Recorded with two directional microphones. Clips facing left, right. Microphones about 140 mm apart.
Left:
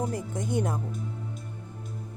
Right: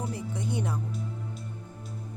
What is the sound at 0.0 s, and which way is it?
Speech, 45° left (ahead or behind).